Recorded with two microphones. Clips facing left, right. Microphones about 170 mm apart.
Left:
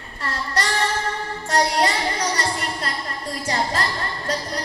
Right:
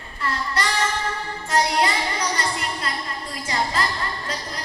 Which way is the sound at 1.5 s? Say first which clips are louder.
Left 1 dB; 40° left (ahead or behind).